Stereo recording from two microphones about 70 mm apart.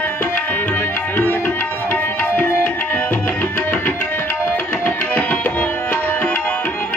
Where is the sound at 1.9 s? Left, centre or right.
Left.